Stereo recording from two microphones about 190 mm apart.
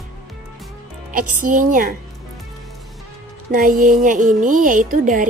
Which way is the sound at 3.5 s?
50° right (ahead or behind).